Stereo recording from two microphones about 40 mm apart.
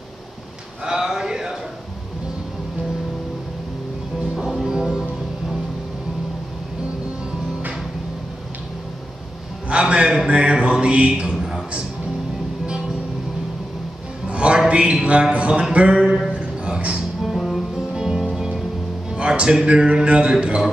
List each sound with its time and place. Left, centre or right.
0.8 s a sound: centre
4.4 s music: centre
9.7 s speech: right
11.3 s a sound: centre
14.2 s music: right
14.7 s mantra: right
16.3 s music: right
17.2 s music: centre
17.9 s music: centre
19.1 s music: right
19.6 s mantra: right